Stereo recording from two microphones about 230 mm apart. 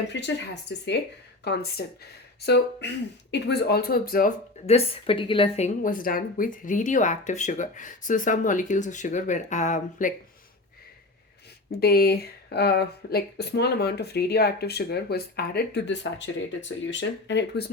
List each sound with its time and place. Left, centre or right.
0.1 s speech: left
3.3 s speech: left
11.8 s speech: left